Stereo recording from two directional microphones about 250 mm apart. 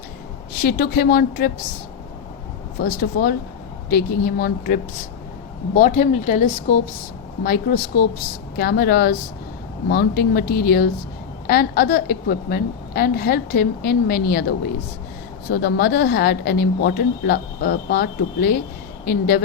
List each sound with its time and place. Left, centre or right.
0.5 s speech: left
2.8 s speech: left
15.4 s speech: left